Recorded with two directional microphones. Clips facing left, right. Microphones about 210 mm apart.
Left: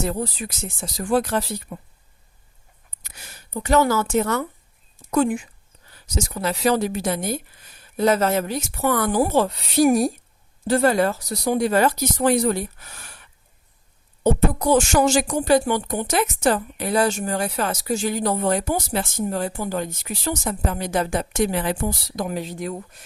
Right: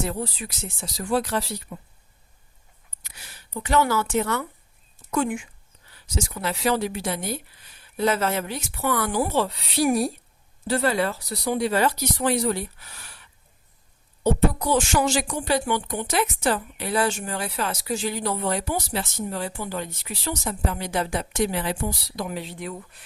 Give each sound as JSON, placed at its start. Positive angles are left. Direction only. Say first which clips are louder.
{"t": 0.0, "sound": "speech", "louder": "left 3 dB", "side_deg": 45}
{"t": 3.0, "sound": "speech", "louder": "left 3 dB", "side_deg": 45}
{"t": 14.6, "sound": "speech", "louder": "left 5 dB", "side_deg": 45}